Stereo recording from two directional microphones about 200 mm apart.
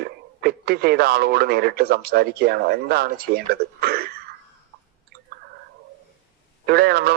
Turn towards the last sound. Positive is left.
turn(degrees=-50)  # may be behind; listen again after turning